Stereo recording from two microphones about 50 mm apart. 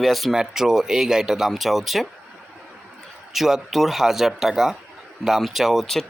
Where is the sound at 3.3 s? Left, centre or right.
Centre.